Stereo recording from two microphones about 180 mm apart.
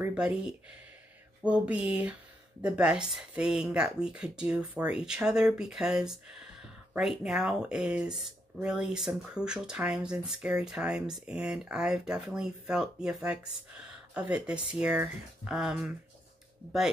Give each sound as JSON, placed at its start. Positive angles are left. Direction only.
{"t": 0.0, "sound": "speech", "side_deg": -5}
{"t": 1.4, "sound": "a sound", "side_deg": -5}
{"t": 2.6, "sound": "speech", "side_deg": -5}